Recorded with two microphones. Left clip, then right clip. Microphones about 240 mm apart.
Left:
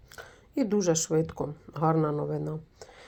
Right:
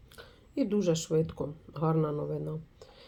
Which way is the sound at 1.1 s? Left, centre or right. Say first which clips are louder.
Left 2 dB; left.